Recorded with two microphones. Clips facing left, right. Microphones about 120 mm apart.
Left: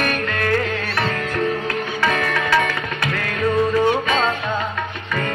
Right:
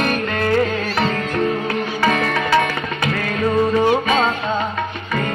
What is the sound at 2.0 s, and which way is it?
Music, 30° right (ahead or behind).